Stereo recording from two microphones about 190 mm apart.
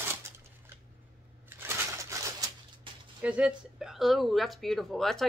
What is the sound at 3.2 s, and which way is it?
Speech, 5° right (ahead or behind).